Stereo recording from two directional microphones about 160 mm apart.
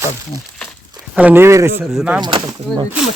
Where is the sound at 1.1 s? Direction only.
10° right (ahead or behind).